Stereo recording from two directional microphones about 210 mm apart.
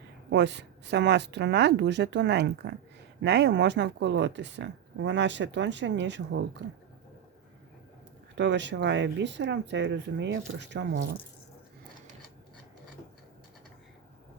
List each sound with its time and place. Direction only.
0.3 s speech: 55° right (ahead or behind)
8.4 s speech: 60° right (ahead or behind)